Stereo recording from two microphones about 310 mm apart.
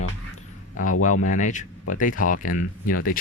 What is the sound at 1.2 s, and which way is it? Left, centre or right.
Speech, left.